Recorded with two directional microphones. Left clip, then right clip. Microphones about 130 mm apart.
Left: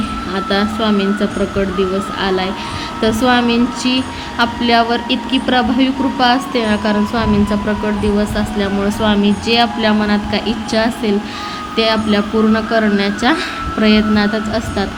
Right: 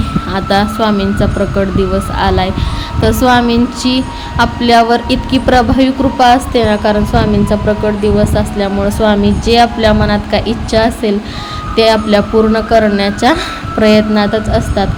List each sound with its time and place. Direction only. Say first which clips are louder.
0.3 s a woman's voice: right 5 dB; 35° right (ahead or behind)